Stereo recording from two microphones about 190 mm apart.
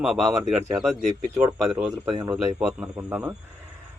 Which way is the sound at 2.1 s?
20° right (ahead or behind).